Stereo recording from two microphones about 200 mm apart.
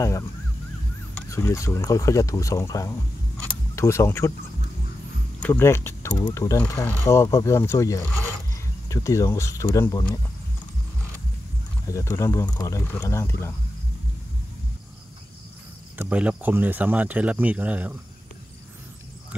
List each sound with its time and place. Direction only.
1.3 s speech: 15° left (ahead or behind)
3.4 s a sound: 15° left (ahead or behind)
5.4 s speech: 10° left (ahead or behind)
11.9 s speech: 15° left (ahead or behind)
16.0 s speech: 5° right (ahead or behind)